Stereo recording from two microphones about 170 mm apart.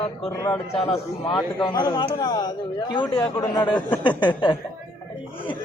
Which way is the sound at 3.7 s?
10° left (ahead or behind).